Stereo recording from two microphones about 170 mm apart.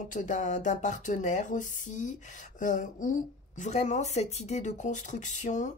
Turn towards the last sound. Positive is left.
turn(degrees=45)  # may be behind; listen again after turning